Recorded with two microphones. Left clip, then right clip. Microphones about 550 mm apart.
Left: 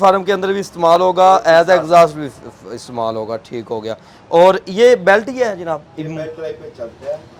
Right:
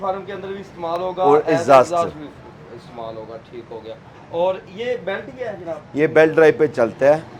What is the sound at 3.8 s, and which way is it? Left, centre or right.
A man's voice, left.